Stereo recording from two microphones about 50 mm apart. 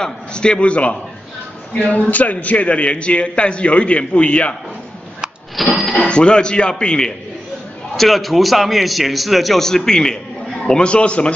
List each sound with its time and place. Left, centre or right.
0.0 s a man's voice: centre
5.6 s a man's voice: centre
5.9 s a man's voice: left
7.9 s a man's voice: centre; by 11.3 s left